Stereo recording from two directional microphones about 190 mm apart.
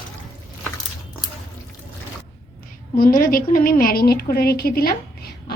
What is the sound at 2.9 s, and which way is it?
A woman's voice, 50° left (ahead or behind).